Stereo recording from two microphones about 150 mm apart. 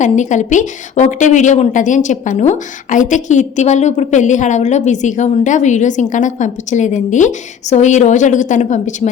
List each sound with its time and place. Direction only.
0.0 s speech: 55° left (ahead or behind)